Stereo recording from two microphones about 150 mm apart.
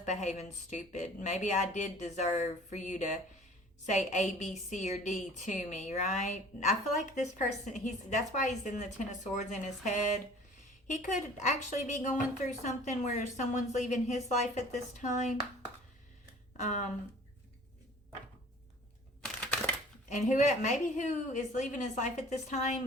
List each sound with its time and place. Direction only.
0.0 s a woman's voice: 50° left (ahead or behind)
16.6 s a woman's voice: 55° left (ahead or behind)
19.2 s a sound: 5° left (ahead or behind)
20.1 s a woman's voice: 55° left (ahead or behind)